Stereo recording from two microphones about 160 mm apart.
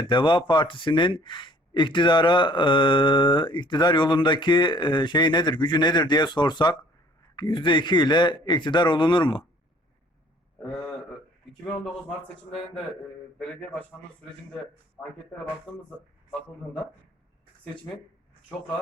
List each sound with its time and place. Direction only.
0.1 s speech: 30° left (ahead or behind)